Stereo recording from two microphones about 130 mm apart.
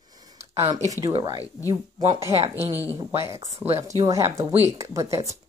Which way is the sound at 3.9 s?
25° right (ahead or behind).